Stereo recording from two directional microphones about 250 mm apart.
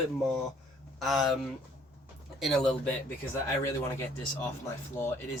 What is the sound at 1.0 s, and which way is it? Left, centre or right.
Speech, centre.